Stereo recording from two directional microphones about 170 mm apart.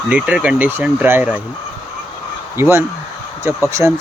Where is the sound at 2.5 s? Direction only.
15° right (ahead or behind).